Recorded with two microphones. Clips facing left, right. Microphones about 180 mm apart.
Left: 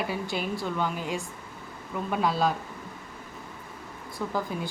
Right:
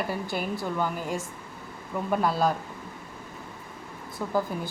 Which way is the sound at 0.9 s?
45° right (ahead or behind).